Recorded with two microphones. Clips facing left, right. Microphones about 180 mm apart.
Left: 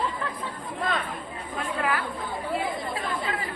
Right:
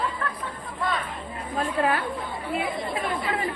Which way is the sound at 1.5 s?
25° right (ahead or behind).